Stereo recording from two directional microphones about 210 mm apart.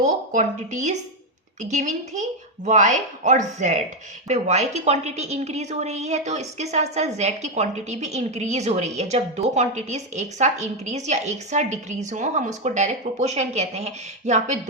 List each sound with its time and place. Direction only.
0.0 s a woman's voice: 35° right (ahead or behind)